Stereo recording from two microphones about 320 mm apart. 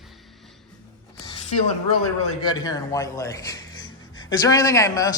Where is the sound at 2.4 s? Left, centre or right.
Centre.